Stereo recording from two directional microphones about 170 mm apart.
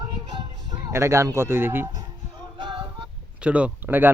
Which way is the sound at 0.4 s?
20° right (ahead or behind).